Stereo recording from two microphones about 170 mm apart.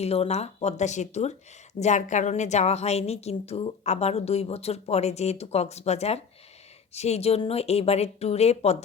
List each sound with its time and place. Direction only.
0.0 s a woman's voice: 35° left (ahead or behind)